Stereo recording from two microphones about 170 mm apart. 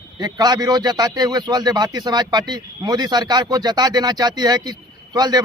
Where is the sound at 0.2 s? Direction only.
25° right (ahead or behind).